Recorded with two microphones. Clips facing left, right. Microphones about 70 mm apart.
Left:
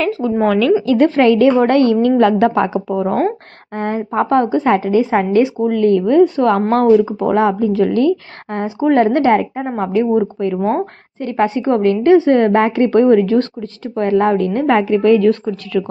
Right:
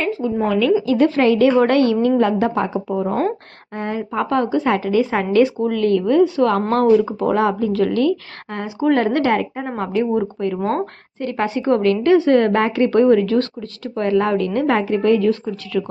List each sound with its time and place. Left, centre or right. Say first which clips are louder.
0.1 s a woman's voice: left 4 dB; left
0.9 s a woman's voice: left 3 dB; left
3.8 s a woman's voice: left 5 dB; left
6.8 s speech: left 3 dB; centre
7.2 s a woman's voice: left 3 dB; left
11.2 s a woman's voice: left 4 dB; left